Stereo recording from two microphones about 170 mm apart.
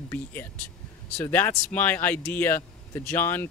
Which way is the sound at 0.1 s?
10° left (ahead or behind).